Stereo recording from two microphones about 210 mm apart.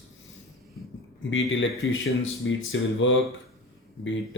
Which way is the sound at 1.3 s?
70° left (ahead or behind).